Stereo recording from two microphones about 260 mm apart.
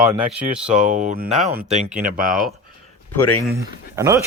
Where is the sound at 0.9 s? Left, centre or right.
Right.